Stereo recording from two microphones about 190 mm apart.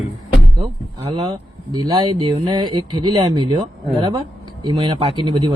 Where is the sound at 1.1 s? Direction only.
25° right (ahead or behind).